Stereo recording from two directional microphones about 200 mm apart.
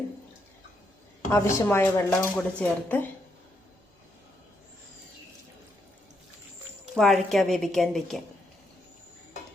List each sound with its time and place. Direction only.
1.3 s speech: 15° left (ahead or behind)
6.9 s a woman's voice: centre (ahead or behind)